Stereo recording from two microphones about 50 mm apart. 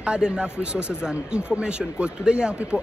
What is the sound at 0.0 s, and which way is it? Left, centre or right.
Speech, centre.